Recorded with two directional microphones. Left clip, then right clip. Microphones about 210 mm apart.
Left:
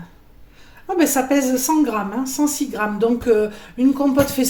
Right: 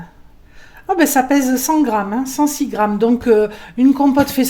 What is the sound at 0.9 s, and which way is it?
Speech, 55° right (ahead or behind).